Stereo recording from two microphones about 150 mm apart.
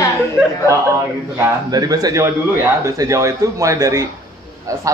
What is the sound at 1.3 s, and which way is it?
Speech, 20° right (ahead or behind).